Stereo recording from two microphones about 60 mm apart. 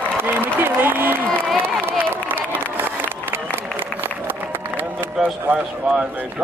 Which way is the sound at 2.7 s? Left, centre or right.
Right.